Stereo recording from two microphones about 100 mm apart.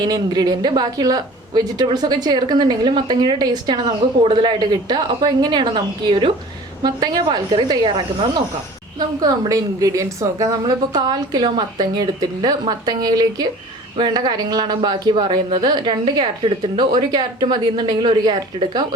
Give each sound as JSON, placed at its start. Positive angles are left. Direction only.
{"t": 0.0, "sound": "a woman's voice", "side_deg": -40}
{"t": 4.2, "sound": "a woman's voice", "side_deg": -60}